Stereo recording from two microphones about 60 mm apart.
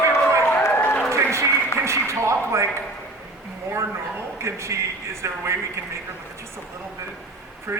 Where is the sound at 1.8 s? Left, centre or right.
Right.